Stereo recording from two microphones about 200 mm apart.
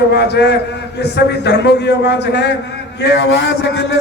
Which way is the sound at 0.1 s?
55° left (ahead or behind).